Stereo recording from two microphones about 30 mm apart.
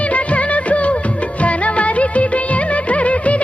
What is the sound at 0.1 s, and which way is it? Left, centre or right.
Music of bollywood, left.